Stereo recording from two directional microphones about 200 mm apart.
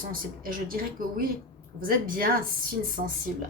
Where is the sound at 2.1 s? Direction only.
45° right (ahead or behind).